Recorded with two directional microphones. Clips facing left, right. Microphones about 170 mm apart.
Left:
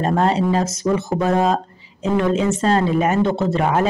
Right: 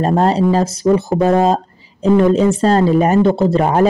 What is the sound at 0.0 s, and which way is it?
Speech, 35° right (ahead or behind).